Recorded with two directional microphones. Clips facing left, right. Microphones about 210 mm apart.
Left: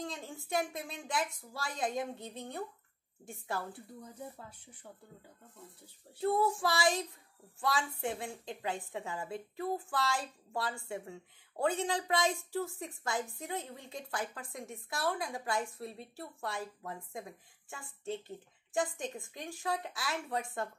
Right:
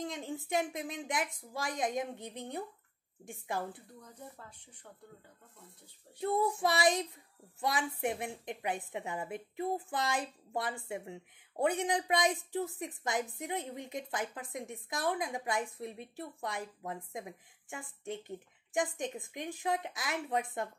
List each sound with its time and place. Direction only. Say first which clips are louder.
0.0 s a woman's voice: right 3 dB; 20° right (ahead or behind)
6.1 s child singing: left 1 dB; 20° right (ahead or behind)
7.6 s a woman's voice: right 1 dB; 20° right (ahead or behind)